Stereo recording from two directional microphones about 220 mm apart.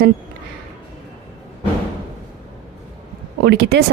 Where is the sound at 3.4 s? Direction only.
50° right (ahead or behind).